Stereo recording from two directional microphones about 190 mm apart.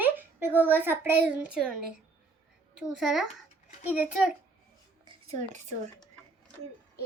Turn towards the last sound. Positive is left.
turn(degrees=-40)  # may be behind; listen again after turning